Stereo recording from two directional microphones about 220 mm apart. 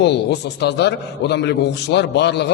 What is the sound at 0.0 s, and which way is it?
A man's voice, 50° left (ahead or behind).